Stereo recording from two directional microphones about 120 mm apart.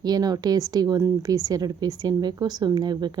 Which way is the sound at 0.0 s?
35° right (ahead or behind).